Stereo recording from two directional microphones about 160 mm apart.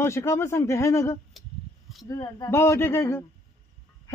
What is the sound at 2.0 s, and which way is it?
A woman's voice, 20° left (ahead or behind).